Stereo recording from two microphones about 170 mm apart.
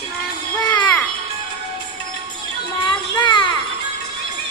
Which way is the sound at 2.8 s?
25° left (ahead or behind).